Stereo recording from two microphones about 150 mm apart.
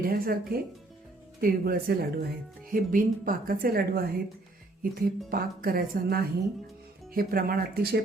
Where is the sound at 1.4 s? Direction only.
85° right.